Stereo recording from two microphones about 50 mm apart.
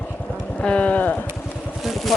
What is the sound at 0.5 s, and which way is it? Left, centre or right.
Livestock, left.